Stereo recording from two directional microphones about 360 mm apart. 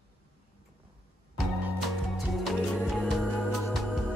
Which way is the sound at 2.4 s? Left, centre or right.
Centre.